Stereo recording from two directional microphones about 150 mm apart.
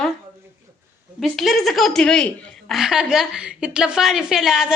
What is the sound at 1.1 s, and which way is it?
A woman's voice, centre (ahead or behind).